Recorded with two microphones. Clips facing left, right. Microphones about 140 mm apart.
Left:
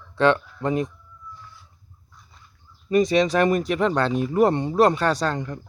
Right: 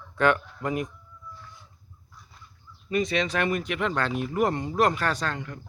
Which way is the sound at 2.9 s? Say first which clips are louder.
Left 7 dB; 40° left (ahead or behind).